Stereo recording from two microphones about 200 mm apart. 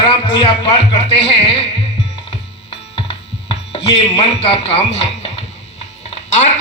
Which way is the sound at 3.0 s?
30° left (ahead or behind).